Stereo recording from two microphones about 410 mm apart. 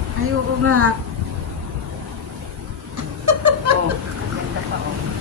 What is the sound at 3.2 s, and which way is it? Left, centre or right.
Snicker, right.